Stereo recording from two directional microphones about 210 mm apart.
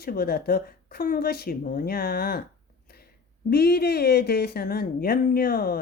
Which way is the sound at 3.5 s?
50° left (ahead or behind).